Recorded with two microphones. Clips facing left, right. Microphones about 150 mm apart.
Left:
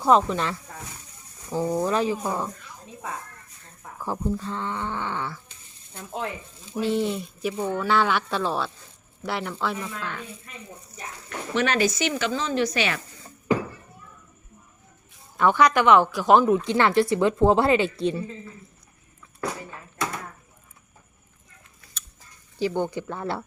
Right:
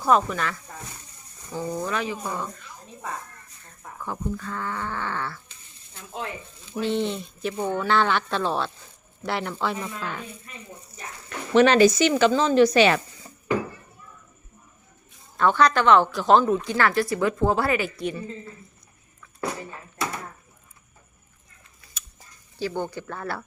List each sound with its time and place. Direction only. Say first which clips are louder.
0.0 s speech: left 2 dB; 25° left (ahead or behind)
4.0 s speech: left 3 dB; 35° left (ahead or behind); by 5.4 s 15° left (ahead or behind)
6.7 s speech: left 1 dB; 5° left (ahead or behind)
9.7 s speech: right 1 dB; 10° right (ahead or behind)
11.5 s speech: right 7 dB; 30° right (ahead or behind)
15.4 s speech: left 1 dB; 15° left (ahead or behind)
22.5 s speech: left 3 dB; 20° left (ahead or behind)